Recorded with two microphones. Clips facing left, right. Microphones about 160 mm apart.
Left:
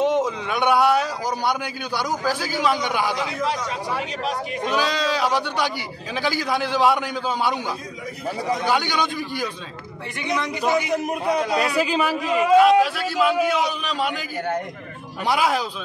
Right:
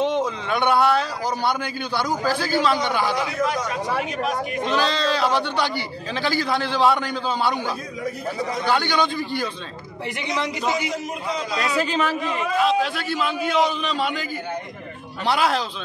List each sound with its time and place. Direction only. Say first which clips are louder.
0.0 s a man's voice: left 2 dB; 10° left (ahead or behind)
4.6 s a man's voice: even; 10° left (ahead or behind)
10.9 s a man's voice: left 5 dB; 60° left (ahead or behind)
11.8 s a man's voice: left 1 dB; 5° left (ahead or behind)